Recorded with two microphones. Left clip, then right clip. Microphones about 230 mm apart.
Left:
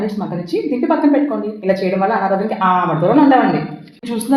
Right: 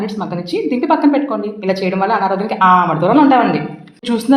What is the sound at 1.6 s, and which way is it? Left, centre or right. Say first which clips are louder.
Speech: left 1 dB; centre.